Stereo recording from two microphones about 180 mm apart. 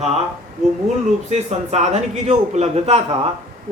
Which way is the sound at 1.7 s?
40° right (ahead or behind).